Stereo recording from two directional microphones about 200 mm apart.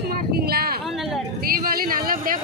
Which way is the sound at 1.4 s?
45° right (ahead or behind).